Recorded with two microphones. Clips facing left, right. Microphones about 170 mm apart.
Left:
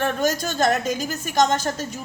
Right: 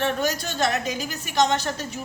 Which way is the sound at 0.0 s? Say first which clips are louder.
Left 2 dB; 45° left (ahead or behind).